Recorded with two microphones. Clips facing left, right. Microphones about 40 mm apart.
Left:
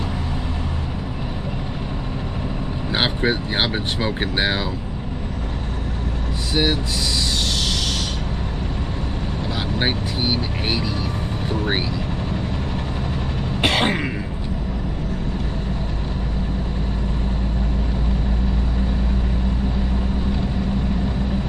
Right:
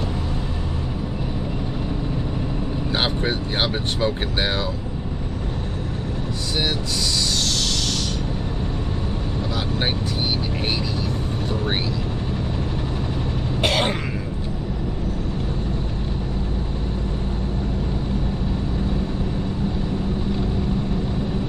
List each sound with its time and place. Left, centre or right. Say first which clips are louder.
2.9 s speech: left 3 dB; centre
6.5 s speech: left 4 dB; centre
9.8 s speech: left 4 dB; centre
13.6 s throat clearing: left 2 dB; centre